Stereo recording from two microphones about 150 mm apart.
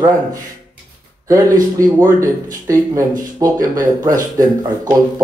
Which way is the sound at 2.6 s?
20° right (ahead or behind).